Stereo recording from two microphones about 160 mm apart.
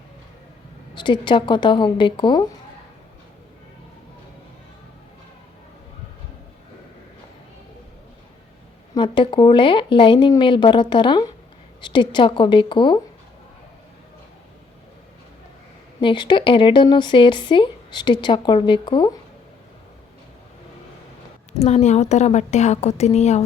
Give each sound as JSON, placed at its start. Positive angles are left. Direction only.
{"t": 0.9, "sound": "speech", "side_deg": 30}
{"t": 9.0, "sound": "speech", "side_deg": 30}
{"t": 16.0, "sound": "speech", "side_deg": 30}
{"t": 21.6, "sound": "a woman's voice", "side_deg": 45}